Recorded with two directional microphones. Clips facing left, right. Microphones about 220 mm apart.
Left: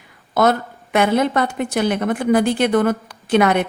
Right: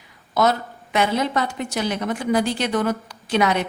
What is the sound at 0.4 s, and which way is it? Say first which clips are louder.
A woman's voice: left 3 dB; 55° left (ahead or behind).